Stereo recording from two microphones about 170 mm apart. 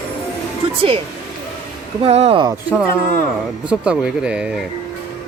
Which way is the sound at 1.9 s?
35° right (ahead or behind).